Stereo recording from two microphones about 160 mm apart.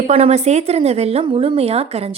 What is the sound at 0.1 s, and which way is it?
A woman's voice, 40° right (ahead or behind).